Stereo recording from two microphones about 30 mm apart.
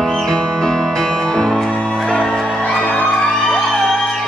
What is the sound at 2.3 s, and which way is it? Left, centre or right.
Music, centre.